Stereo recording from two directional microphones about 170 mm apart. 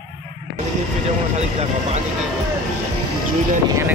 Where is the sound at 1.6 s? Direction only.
40° right (ahead or behind).